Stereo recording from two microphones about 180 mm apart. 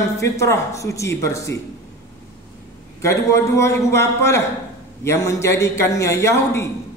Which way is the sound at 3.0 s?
15° left (ahead or behind).